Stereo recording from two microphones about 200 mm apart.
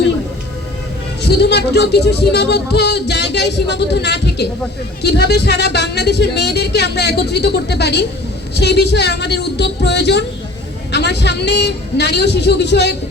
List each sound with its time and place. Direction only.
1.2 s speech: 55° left (ahead or behind)